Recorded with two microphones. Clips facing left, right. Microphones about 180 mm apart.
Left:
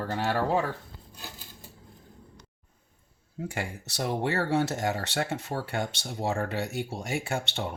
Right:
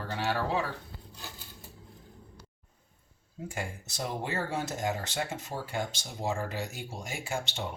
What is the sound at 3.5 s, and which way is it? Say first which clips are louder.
Speech: even; 70° left (ahead or behind).